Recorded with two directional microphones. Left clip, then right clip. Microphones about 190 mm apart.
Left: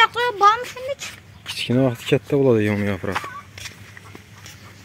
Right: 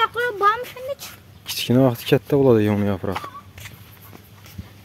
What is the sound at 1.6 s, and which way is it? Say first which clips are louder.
Speech: right 2 dB; 20° right (ahead or behind).